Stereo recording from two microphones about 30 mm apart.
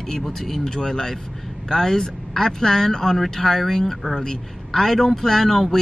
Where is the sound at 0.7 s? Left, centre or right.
Centre.